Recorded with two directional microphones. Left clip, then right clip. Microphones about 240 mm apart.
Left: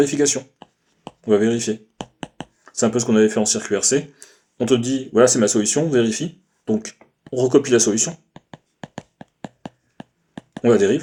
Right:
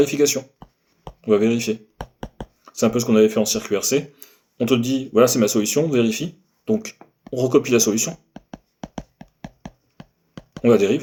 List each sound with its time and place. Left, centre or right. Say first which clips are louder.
0.0 s speech: even; left
8.8 s a sound: even; centre
10.6 s speech: even; left